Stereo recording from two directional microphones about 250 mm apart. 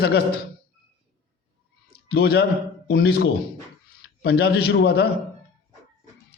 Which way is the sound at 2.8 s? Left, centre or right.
Left.